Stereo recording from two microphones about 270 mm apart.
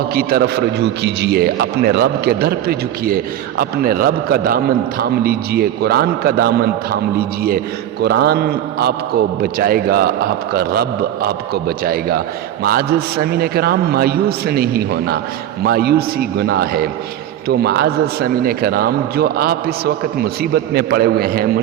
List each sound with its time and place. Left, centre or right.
0.1 s a man's voice: right